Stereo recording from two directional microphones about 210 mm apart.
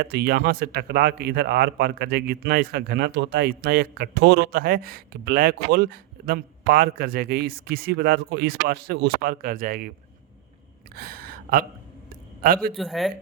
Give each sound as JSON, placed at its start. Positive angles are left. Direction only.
{"t": 0.0, "sound": "speech", "side_deg": -50}
{"t": 10.9, "sound": "gasp", "side_deg": -45}
{"t": 12.7, "sound": "speech", "side_deg": 0}